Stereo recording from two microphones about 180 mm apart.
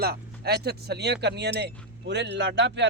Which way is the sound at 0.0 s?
60° right (ahead or behind).